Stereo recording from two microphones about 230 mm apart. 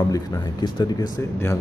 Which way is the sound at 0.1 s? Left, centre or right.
Centre.